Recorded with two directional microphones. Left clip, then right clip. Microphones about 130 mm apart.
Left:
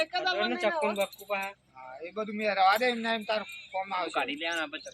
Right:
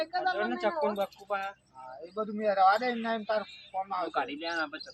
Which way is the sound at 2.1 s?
Centre (ahead or behind).